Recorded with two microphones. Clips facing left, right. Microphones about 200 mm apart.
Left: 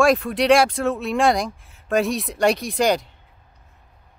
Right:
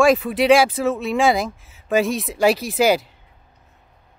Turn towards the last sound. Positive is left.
turn(degrees=-5)  # may be behind; listen again after turning